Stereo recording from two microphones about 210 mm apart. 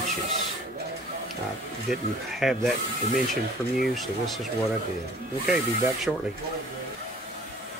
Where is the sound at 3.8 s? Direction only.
Centre (ahead or behind).